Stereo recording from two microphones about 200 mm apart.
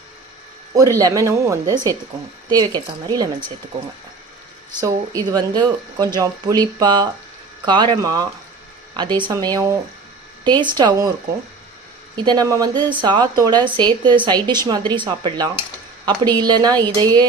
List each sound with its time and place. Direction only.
0.8 s speech: 15° right (ahead or behind)
4.8 s speech: 20° right (ahead or behind)
12.1 s speech: 20° right (ahead or behind)